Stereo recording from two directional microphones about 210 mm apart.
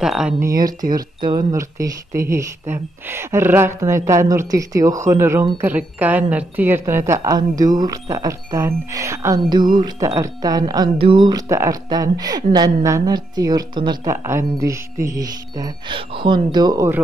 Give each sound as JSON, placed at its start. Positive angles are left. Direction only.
{"t": 0.0, "sound": "speech", "side_deg": -5}
{"t": 0.5, "sound": "speech", "side_deg": -15}
{"t": 0.7, "sound": "speech", "side_deg": -40}
{"t": 1.2, "sound": "speech", "side_deg": -15}